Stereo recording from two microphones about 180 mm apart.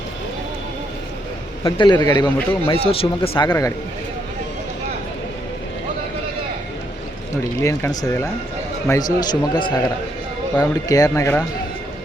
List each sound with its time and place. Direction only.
1.6 s a man's voice: 20° left (ahead or behind)
7.6 s a man's voice: 15° left (ahead or behind)